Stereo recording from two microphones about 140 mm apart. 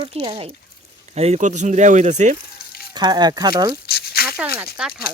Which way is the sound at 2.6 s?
90° left.